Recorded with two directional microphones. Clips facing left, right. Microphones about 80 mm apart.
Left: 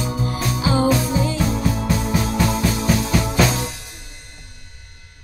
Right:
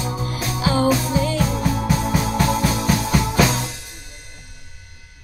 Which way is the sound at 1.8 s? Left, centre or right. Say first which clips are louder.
Even; centre.